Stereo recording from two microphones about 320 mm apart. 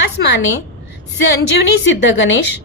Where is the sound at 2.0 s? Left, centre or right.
Left.